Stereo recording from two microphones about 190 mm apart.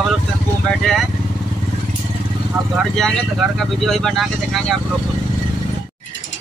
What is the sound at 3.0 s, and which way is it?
Speech, centre (ahead or behind).